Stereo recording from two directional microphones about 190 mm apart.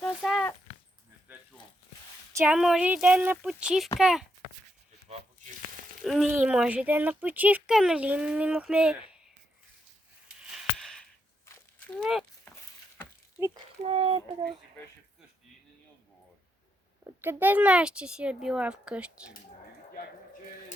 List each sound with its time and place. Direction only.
0.0 s a sound: centre (ahead or behind)
2.3 s speech: 10° right (ahead or behind)
6.0 s speech: centre (ahead or behind)
10.5 s a sound: centre (ahead or behind)
11.9 s speech: centre (ahead or behind)
13.8 s speech: 30° right (ahead or behind)
17.0 s speech: 10° right (ahead or behind)